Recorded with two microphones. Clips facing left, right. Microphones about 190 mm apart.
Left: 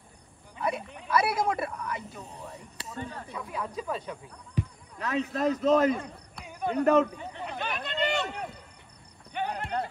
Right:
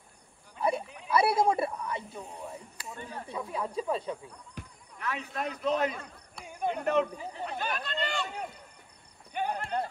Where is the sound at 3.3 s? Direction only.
30° right (ahead or behind).